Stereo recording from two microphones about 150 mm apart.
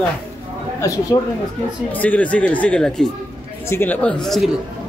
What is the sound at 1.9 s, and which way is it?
Speech, 10° left (ahead or behind).